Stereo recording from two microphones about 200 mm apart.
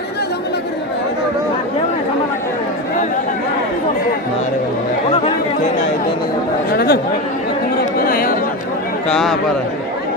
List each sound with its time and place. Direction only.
6.7 s chatter: 50° left (ahead or behind)
8.0 s chatter: 45° left (ahead or behind)
9.1 s a sound: centre (ahead or behind)